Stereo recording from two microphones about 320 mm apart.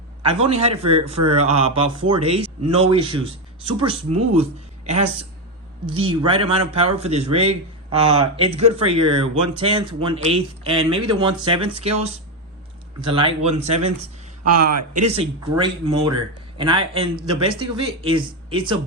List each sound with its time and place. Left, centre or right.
0.2 s a man's voice: centre